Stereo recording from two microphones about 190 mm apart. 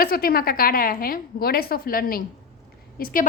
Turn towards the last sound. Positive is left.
turn(degrees=50)  # may be behind; listen again after turning